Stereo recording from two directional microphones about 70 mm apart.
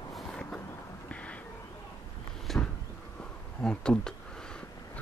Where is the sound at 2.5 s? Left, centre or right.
Centre.